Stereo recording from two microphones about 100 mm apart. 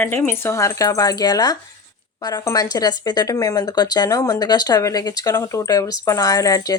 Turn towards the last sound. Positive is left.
turn(degrees=35)  # may be behind; listen again after turning